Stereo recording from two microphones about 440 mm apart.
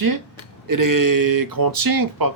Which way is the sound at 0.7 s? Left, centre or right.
Right.